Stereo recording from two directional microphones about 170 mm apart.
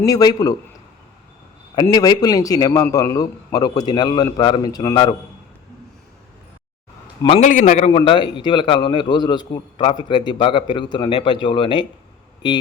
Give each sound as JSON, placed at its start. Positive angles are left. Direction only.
{"t": 0.0, "sound": "a man's voice", "side_deg": 20}
{"t": 1.7, "sound": "a man's voice", "side_deg": 25}
{"t": 7.3, "sound": "a man's voice", "side_deg": 40}
{"t": 7.9, "sound": "a man's voice", "side_deg": 30}